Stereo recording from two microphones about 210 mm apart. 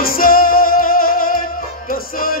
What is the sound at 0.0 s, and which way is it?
Music, 45° left (ahead or behind).